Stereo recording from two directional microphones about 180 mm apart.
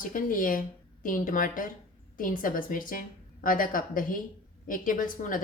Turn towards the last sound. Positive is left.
turn(degrees=50)  # may be behind; listen again after turning